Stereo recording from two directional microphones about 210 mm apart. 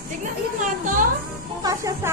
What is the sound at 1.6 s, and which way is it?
Music, 15° right (ahead or behind).